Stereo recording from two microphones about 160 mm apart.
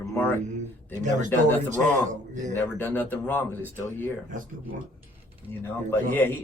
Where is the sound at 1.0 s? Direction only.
50° right (ahead or behind).